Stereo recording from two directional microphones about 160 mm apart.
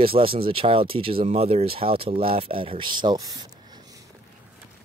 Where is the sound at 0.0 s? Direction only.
35° right (ahead or behind).